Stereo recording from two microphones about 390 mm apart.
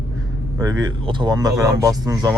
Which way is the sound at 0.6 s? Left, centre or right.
Centre.